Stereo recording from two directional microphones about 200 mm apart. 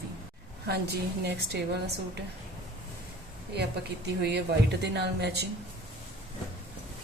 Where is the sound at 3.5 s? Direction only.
55° right (ahead or behind).